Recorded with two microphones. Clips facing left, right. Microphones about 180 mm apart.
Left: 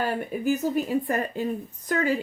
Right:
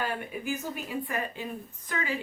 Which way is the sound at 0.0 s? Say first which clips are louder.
Left 7 dB; 40° left (ahead or behind).